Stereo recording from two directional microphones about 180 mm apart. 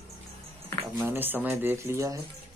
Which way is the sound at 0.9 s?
10° right (ahead or behind).